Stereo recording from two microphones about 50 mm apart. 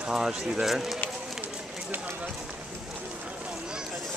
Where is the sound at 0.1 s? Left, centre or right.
Centre.